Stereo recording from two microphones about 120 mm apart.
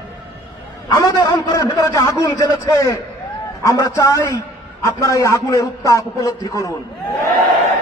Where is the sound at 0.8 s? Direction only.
30° left (ahead or behind).